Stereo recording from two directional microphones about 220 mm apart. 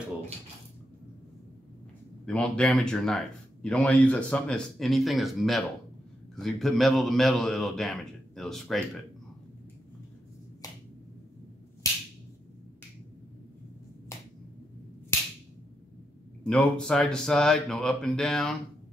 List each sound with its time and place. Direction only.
2.2 s speech: 5° left (ahead or behind)
10.6 s finger snapping: 15° left (ahead or behind)
16.4 s speech: 5° left (ahead or behind)